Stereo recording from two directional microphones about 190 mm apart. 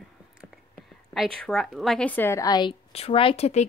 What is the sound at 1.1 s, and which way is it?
A woman's voice, centre (ahead or behind).